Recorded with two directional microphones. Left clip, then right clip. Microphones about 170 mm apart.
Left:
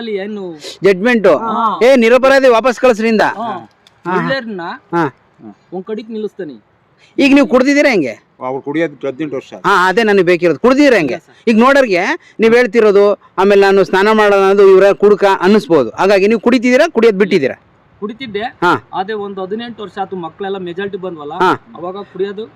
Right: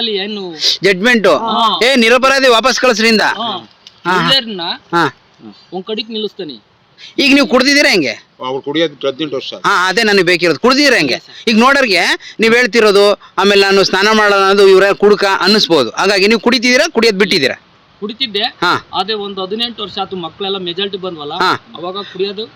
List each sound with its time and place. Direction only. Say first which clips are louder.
0.0 s speech: right 3 dB; 10° left (ahead or behind)